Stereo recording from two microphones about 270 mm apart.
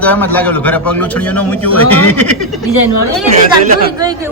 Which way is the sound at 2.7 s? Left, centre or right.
Left.